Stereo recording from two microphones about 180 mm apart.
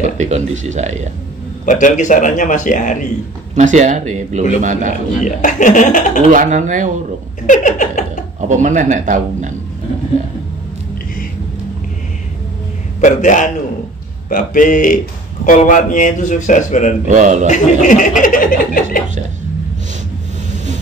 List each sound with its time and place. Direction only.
0.2 s speech: 40° right (ahead or behind)
1.7 s speech: 45° left (ahead or behind)
3.5 s speech: 40° right (ahead or behind)
5.2 s speech: 45° left (ahead or behind)
6.3 s speech: 45° right (ahead or behind)
7.4 s speech: 45° left (ahead or behind)
8.4 s speech: 45° right (ahead or behind)
13.0 s speech: 45° left (ahead or behind)
17.1 s speech: 45° right (ahead or behind)
17.5 s speech: 45° left (ahead or behind)